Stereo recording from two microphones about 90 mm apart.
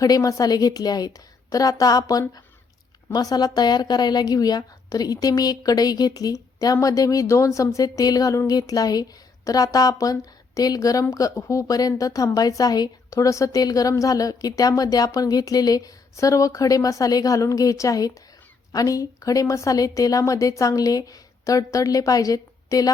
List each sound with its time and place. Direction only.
0.0 s a woman's voice: 40° left (ahead or behind)